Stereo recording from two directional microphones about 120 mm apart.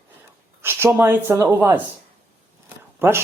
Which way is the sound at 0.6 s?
20° right (ahead or behind).